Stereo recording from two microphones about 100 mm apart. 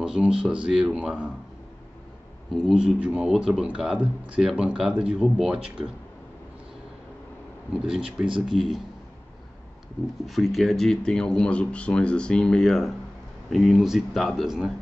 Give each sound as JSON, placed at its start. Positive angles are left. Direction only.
{"t": 0.0, "sound": "speech", "side_deg": -10}
{"t": 2.5, "sound": "speech", "side_deg": -5}
{"t": 7.7, "sound": "speech", "side_deg": -10}
{"t": 8.3, "sound": "speech", "side_deg": -55}
{"t": 10.2, "sound": "speech", "side_deg": 0}